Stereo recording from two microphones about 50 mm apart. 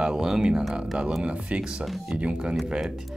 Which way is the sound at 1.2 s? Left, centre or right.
Right.